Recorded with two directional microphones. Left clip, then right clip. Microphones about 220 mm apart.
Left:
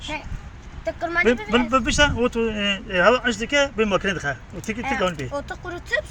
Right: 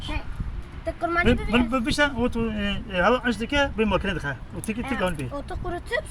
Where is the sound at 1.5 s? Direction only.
Centre (ahead or behind).